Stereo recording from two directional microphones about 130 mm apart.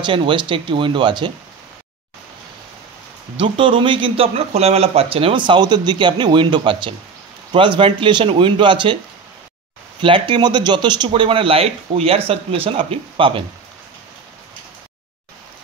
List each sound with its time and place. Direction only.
0.0 s speech: 40° right (ahead or behind)
3.3 s speech: 40° right (ahead or behind)
10.0 s speech: 40° right (ahead or behind)